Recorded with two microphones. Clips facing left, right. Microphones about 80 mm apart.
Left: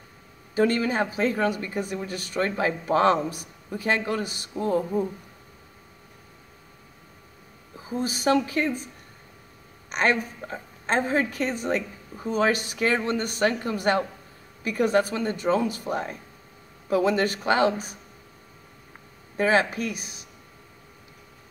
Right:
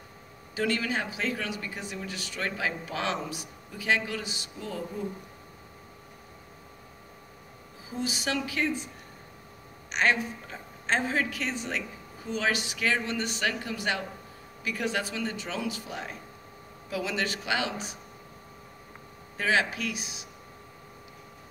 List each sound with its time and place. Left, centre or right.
0.6 s speech: left
7.9 s speech: left
9.8 s speech: left
19.3 s speech: left